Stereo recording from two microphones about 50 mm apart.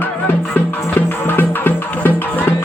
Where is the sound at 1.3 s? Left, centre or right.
Left.